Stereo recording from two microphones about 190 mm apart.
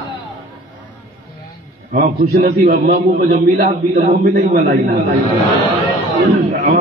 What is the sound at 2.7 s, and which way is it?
A man's voice, 50° right (ahead or behind).